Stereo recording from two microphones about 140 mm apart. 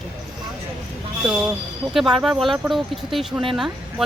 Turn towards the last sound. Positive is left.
turn(degrees=-5)  # may be behind; listen again after turning